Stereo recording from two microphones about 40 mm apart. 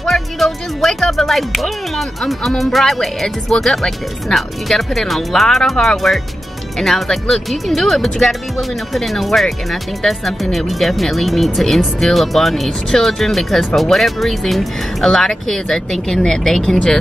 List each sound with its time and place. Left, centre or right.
0.0 s music: centre
1.1 s speech: centre
3.5 s speech: left
4.4 s speech: centre